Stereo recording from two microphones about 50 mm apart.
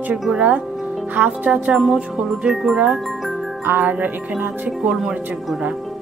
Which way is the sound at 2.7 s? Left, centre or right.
Right.